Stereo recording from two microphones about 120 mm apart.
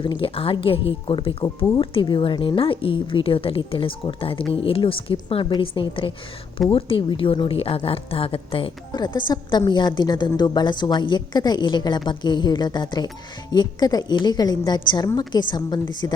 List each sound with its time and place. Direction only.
0.0 s a woman's voice: 45° left (ahead or behind)
8.9 s a woman's voice: 40° left (ahead or behind)